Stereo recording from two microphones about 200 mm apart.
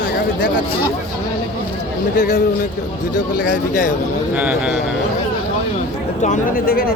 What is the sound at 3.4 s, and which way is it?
Speech, 40° left (ahead or behind).